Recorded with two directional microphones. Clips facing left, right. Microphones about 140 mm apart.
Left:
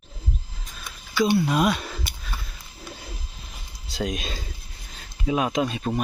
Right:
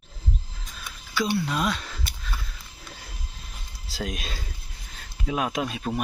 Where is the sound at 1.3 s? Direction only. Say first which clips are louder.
Left 5 dB; 15° left (ahead or behind).